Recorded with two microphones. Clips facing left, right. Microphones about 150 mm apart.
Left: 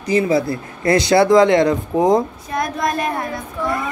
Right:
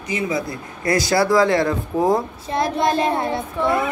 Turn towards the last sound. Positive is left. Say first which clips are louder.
# right 3 dB
turn(degrees=-25)  # may be behind; listen again after turning